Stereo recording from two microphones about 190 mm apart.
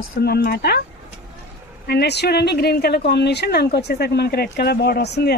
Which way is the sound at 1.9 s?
60° left (ahead or behind).